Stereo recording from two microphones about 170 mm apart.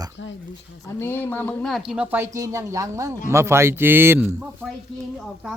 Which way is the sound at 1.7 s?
Centre (ahead or behind).